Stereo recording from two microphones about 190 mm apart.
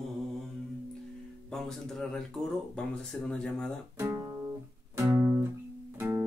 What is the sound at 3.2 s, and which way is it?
Speech, 5° left (ahead or behind).